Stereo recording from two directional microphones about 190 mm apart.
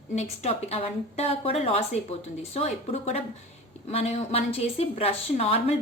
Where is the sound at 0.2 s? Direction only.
35° left (ahead or behind).